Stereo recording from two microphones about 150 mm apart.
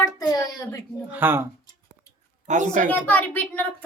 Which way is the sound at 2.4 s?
55° right (ahead or behind).